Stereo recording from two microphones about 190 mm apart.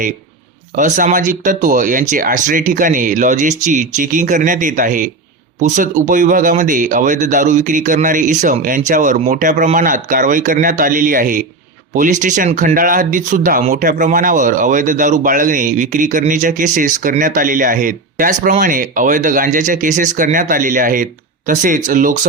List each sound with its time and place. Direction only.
0.8 s speech: 40° right (ahead or behind)